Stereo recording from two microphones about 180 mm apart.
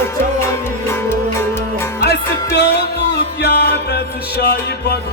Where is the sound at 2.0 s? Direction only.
65° left (ahead or behind).